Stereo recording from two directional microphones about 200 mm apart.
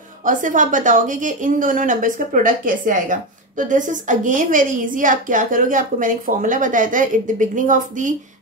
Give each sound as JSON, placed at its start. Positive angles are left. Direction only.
{"t": 0.2, "sound": "a woman's voice", "side_deg": -40}